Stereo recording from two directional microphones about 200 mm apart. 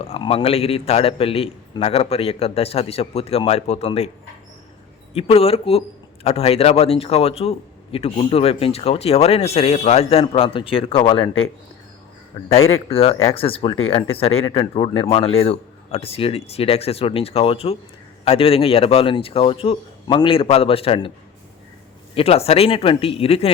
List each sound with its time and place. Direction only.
0.0 s a man's voice: 30° left (ahead or behind)
5.1 s a man's voice: 30° left (ahead or behind)
12.9 s a man's voice: 30° left (ahead or behind)
22.1 s a man's voice: 30° left (ahead or behind)